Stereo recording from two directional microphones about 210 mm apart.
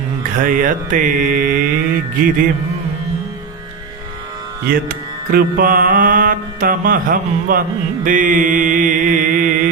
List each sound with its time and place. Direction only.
0.2 s music: 40° right (ahead or behind)
4.7 s music: 45° right (ahead or behind)
8.0 s mantra: 40° right (ahead or behind)